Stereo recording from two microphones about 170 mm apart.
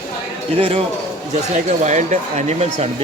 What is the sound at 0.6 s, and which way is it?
Speech, 35° right (ahead or behind).